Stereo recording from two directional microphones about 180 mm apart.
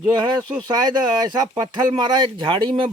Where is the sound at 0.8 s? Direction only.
25° right (ahead or behind).